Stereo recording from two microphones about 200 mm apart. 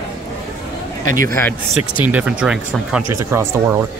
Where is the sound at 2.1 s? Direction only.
5° right (ahead or behind).